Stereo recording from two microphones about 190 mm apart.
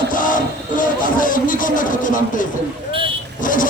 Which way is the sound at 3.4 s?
45° left (ahead or behind).